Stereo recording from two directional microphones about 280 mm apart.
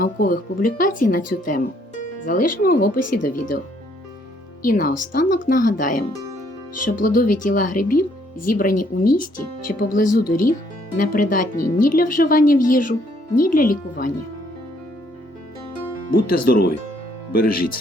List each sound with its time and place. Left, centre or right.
0.0 s speech: left
4.6 s speech: left
16.1 s speech: left